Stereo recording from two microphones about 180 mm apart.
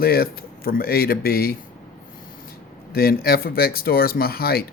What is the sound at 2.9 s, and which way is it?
Speech, 55° left (ahead or behind).